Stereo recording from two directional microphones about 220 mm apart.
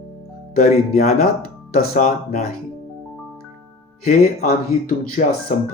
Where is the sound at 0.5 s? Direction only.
40° left (ahead or behind).